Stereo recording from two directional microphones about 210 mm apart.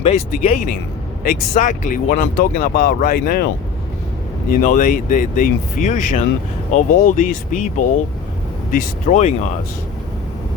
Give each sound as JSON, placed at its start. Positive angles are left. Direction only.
{"t": 0.0, "sound": "speech", "side_deg": 30}
{"t": 4.6, "sound": "speech", "side_deg": 35}